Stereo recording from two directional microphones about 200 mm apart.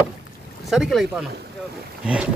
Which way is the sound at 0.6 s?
Centre (ahead or behind).